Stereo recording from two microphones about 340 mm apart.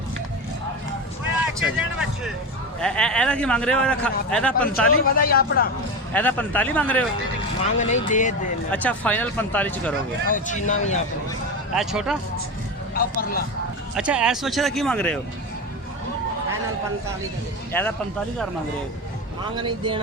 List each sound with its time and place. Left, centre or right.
1.6 s a man's voice: centre
5.1 s speech: left
6.1 s a man's voice: centre
7.6 s speech: left
8.7 s a man's voice: centre
10.3 s speech: left
11.7 s a man's voice: centre
12.9 s speech: left
13.9 s a man's voice: centre
17.7 s speech: centre
19.5 s speech: centre